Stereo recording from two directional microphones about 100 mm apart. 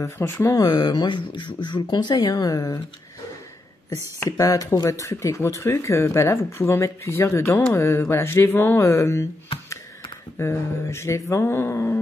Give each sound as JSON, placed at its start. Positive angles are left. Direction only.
{"t": 0.2, "sound": "speech", "side_deg": 25}
{"t": 0.7, "sound": "speech", "side_deg": 45}
{"t": 3.9, "sound": "speech", "side_deg": 35}
{"t": 10.4, "sound": "speech", "side_deg": 25}